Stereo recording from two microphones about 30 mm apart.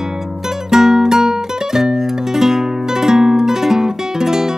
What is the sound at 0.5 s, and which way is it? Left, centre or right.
Music, centre.